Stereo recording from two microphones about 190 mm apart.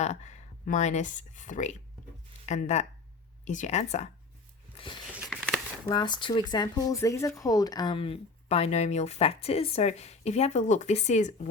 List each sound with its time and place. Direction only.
0.0 s a woman's voice: 35° left (ahead or behind)
5.3 s a sound: centre (ahead or behind)
5.9 s a woman's voice: 25° left (ahead or behind); by 11.4 s 40° left (ahead or behind)